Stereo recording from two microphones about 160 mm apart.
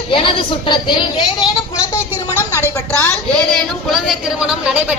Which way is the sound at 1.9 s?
15° left (ahead or behind).